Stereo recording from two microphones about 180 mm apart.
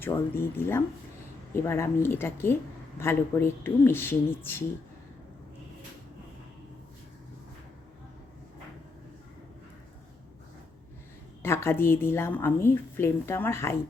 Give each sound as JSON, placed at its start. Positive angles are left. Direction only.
{"t": 0.0, "sound": "a woman's voice", "side_deg": 15}
{"t": 11.4, "sound": "a woman's voice", "side_deg": 15}